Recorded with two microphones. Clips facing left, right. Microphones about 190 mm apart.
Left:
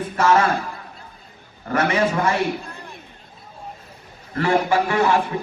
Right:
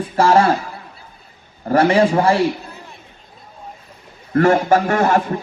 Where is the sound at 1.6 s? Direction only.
30° right (ahead or behind).